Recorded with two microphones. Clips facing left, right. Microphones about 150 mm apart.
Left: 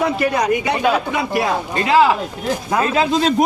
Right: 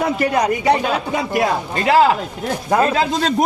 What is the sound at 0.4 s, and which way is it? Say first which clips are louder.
Speech: right 1 dB; 35° right (ahead or behind).